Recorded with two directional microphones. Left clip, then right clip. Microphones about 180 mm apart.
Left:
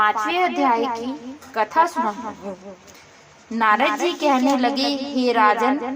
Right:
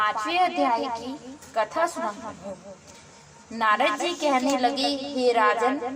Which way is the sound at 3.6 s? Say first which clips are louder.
Left 4 dB; 20° left (ahead or behind).